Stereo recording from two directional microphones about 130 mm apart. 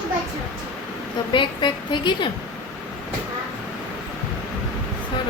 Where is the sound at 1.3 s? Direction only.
40° left (ahead or behind).